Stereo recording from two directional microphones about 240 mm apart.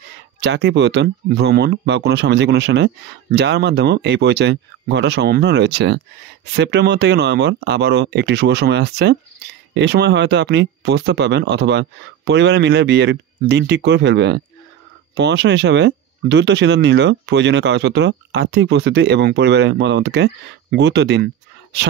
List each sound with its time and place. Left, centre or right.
0.4 s speech: right